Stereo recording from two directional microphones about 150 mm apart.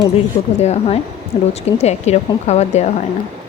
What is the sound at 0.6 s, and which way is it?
Speech, 45° left (ahead or behind).